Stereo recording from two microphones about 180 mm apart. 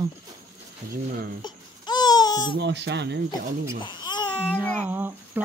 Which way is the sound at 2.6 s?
75° right (ahead or behind).